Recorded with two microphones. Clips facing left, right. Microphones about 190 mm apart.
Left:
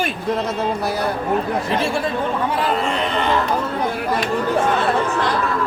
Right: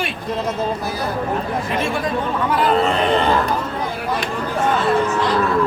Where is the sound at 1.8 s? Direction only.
30° left (ahead or behind).